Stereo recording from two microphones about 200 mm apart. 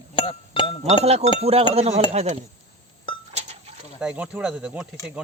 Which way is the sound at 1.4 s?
30° right (ahead or behind).